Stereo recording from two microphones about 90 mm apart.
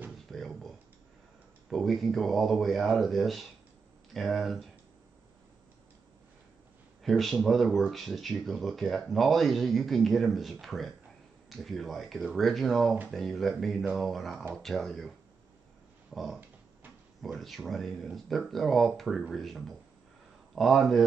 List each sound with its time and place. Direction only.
0.3 s a sound: 5° left (ahead or behind)
1.7 s speech: centre (ahead or behind)
7.0 s speech: centre (ahead or behind)